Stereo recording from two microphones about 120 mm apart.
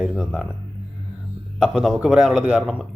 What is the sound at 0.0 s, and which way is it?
Speech, 5° right (ahead or behind).